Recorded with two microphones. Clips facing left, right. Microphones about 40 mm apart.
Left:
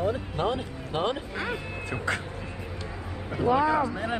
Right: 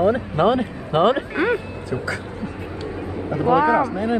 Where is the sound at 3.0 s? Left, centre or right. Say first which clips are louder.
Right 10 dB; centre.